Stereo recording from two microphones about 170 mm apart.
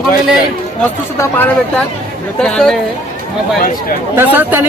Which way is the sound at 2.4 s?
5° left (ahead or behind).